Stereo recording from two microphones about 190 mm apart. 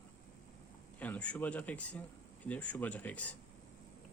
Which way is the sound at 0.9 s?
10° left (ahead or behind).